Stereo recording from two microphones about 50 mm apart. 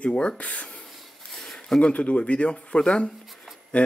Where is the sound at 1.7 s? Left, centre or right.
Left.